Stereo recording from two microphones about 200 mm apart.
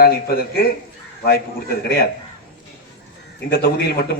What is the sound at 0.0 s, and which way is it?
Speech, 50° left (ahead or behind).